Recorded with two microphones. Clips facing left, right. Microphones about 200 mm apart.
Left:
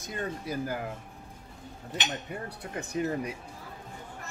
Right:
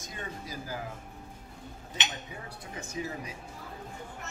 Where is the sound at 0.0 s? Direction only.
60° left (ahead or behind).